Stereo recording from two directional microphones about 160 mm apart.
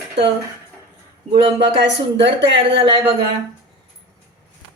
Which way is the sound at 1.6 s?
90° right.